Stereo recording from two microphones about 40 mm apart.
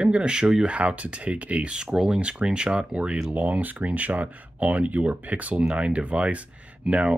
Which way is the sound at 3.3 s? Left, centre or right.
Right.